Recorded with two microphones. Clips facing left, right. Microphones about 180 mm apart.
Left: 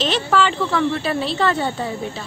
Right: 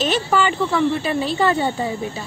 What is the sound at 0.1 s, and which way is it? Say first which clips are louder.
Speech: even; 5° right (ahead or behind).